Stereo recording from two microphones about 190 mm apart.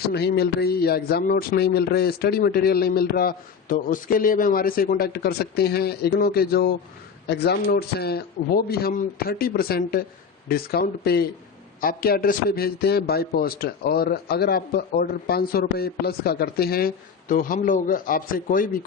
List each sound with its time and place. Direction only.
0.1 s a man's voice: 60° left (ahead or behind)